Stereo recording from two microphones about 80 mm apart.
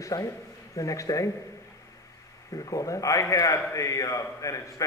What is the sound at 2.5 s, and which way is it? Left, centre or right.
A man's voice, left.